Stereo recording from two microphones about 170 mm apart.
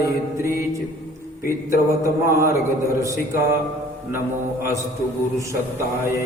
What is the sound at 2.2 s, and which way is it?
Mantra, 15° right (ahead or behind).